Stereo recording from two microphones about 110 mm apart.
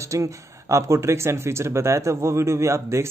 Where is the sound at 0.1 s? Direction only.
30° right (ahead or behind).